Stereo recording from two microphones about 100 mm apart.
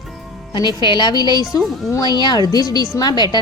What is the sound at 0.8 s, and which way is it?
Speech, 50° left (ahead or behind).